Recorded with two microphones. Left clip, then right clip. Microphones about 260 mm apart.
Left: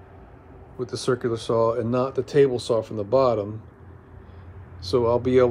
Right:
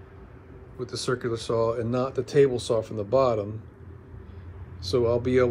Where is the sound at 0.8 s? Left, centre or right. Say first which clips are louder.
Left 4 dB; centre.